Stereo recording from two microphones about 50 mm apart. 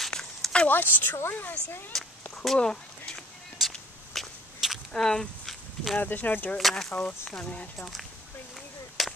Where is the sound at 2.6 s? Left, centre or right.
Centre.